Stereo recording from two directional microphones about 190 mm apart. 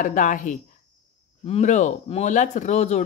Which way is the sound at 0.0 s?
40° left (ahead or behind).